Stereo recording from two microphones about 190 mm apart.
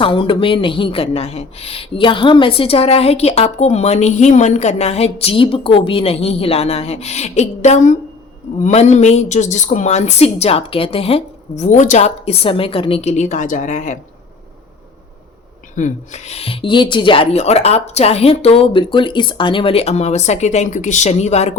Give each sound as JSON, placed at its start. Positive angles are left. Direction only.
{"t": 0.0, "sound": "speech", "side_deg": 25}
{"t": 15.7, "sound": "speech", "side_deg": 40}